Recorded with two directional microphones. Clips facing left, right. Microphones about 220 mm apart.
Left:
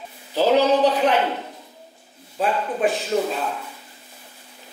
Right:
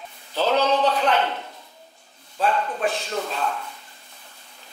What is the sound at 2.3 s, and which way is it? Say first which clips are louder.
A man's voice: left 1 dB; 5° left (ahead or behind).